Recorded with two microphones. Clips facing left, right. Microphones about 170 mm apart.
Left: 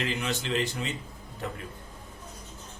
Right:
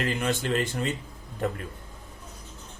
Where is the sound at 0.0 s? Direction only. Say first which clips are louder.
Right 4 dB; 50° right (ahead or behind).